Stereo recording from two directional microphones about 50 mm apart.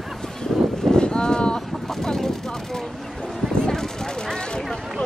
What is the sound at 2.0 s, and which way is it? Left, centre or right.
Vehicle, centre.